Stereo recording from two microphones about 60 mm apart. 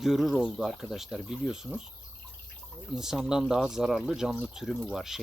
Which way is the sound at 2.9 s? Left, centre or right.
Centre.